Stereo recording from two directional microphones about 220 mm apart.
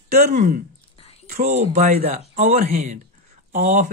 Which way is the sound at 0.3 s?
35° right (ahead or behind).